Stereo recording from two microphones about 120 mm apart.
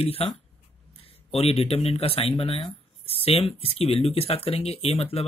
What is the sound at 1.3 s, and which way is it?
Mantra, 55° left (ahead or behind).